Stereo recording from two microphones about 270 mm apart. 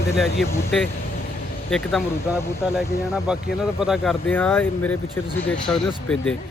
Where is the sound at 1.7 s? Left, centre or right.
Centre.